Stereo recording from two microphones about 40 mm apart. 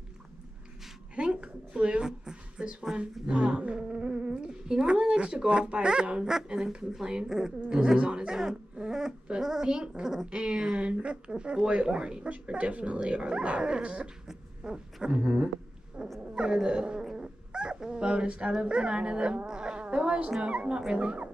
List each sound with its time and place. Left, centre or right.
1.1 s a sound: right
6.3 s a woman's voice: centre
9.4 s a woman's voice: centre
16.0 s dog: right
16.3 s cat: right
18.5 s a woman's voice: right